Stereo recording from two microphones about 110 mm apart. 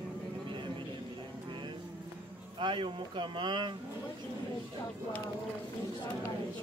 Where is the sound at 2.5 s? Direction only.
50° right (ahead or behind).